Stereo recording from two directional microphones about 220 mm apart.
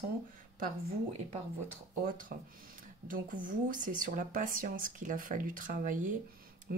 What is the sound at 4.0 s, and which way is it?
Speech, 35° right (ahead or behind).